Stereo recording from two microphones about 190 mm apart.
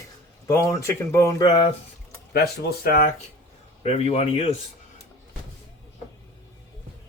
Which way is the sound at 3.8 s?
35° left (ahead or behind).